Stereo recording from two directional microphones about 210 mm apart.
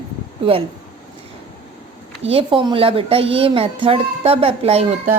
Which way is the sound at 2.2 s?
25° right (ahead or behind).